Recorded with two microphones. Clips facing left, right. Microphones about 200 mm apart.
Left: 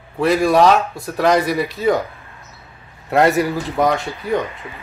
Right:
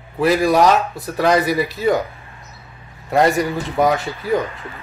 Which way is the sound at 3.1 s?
Centre (ahead or behind).